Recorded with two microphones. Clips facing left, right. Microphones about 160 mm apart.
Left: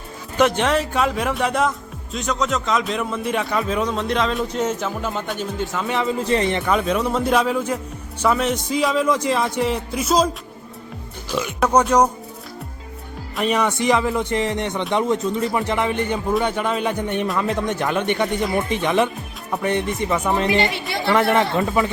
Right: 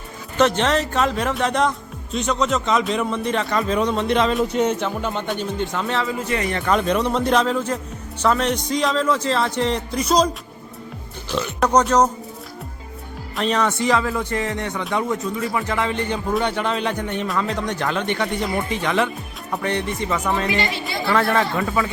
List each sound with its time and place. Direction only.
0.3 s a man's voice: 10° left (ahead or behind)
5.9 s speech: 20° left (ahead or behind)
6.2 s speech: 30° left (ahead or behind)
6.7 s a man's voice: 5° left (ahead or behind)
11.3 s a man's voice: 10° left (ahead or behind)
13.4 s a man's voice: 10° left (ahead or behind)